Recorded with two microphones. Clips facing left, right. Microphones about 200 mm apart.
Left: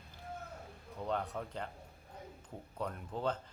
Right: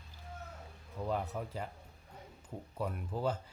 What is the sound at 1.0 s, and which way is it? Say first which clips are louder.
Speech: right 1 dB; 5° right (ahead or behind).